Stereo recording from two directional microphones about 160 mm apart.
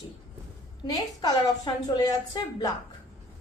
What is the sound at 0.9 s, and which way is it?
A woman's voice, 25° left (ahead or behind).